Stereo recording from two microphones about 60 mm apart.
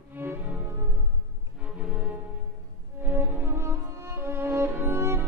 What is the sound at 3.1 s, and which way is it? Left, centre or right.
Music, right.